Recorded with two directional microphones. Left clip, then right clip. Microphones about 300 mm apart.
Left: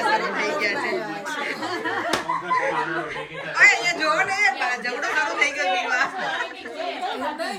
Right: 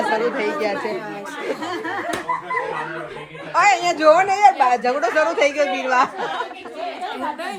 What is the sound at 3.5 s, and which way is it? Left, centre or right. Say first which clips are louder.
Speech: right 1 dB; centre.